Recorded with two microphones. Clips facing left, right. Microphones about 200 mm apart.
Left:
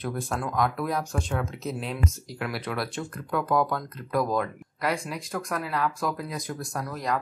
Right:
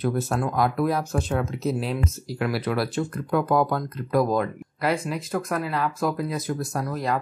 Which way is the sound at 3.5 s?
30° right (ahead or behind).